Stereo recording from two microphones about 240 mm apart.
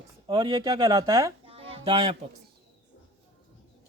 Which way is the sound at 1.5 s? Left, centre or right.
Right.